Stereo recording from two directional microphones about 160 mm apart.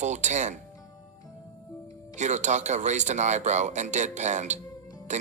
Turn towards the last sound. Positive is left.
turn(degrees=-50)  # may be behind; listen again after turning